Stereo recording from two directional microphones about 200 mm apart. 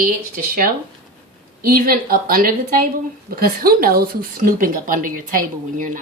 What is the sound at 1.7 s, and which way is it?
Speech, 45° right (ahead or behind).